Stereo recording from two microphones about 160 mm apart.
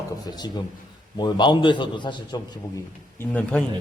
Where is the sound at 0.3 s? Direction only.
25° left (ahead or behind).